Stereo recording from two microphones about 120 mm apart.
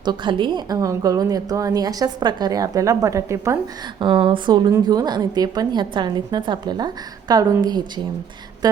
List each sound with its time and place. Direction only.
0.0 s a woman's voice: 40° right (ahead or behind)
4.0 s a woman's voice: 45° right (ahead or behind)
8.6 s a sound: 35° right (ahead or behind)